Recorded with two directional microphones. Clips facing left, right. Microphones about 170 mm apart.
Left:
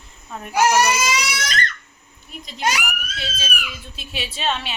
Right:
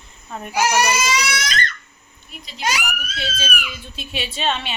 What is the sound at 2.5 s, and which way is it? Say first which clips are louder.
Speech: left 2 dB; 50° left (ahead or behind).